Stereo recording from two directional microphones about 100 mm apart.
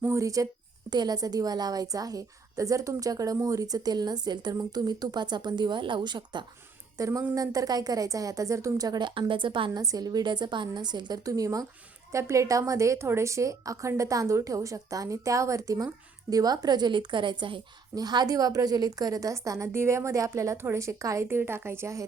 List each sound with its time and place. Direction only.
0.1 s a woman's voice: 35° right (ahead or behind); by 6.4 s 50° right (ahead or behind)
6.9 s a woman's voice: 35° right (ahead or behind); by 9.8 s 50° right (ahead or behind)
9.8 s a woman's voice: 40° right (ahead or behind)
11.3 s a woman's voice: 35° right (ahead or behind); by 17.6 s 55° right (ahead or behind)
17.9 s a woman's voice: 40° right (ahead or behind)